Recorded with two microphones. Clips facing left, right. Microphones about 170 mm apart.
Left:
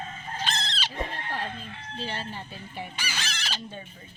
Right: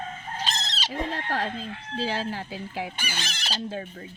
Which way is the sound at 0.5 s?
40° right (ahead or behind).